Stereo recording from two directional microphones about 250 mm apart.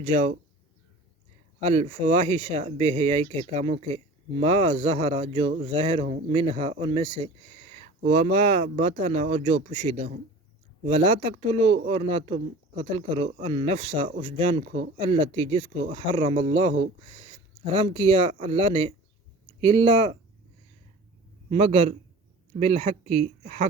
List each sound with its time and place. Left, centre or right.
0.0 s speech: right
1.6 s speech: right
21.5 s speech: right